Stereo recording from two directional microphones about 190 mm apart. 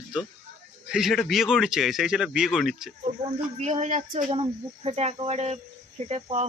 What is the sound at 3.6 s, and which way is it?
Speech, 35° right (ahead or behind).